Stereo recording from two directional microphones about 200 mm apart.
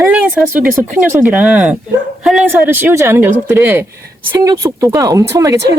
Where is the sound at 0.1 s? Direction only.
10° right (ahead or behind).